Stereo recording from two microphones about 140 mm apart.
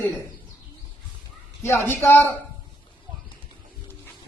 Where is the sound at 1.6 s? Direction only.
15° left (ahead or behind).